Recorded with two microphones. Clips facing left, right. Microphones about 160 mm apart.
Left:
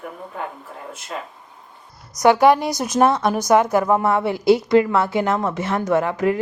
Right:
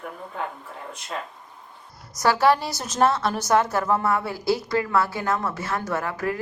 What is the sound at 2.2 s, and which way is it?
A woman's voice, 15° left (ahead or behind).